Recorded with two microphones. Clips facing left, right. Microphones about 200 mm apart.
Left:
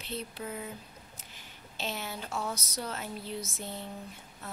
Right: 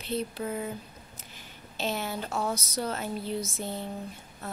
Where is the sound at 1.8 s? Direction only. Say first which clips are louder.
Right 6 dB; 45° right (ahead or behind).